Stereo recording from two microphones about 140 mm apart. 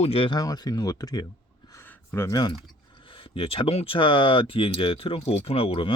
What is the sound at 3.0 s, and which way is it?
Speech, 40° left (ahead or behind).